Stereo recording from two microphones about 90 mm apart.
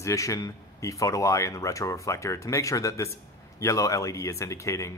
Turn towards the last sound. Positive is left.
turn(degrees=35)  # may be behind; listen again after turning